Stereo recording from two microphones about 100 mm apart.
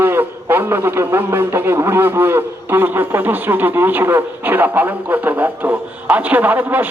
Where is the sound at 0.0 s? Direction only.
20° right (ahead or behind).